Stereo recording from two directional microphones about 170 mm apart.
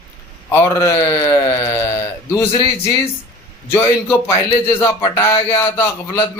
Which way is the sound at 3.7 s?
15° left (ahead or behind).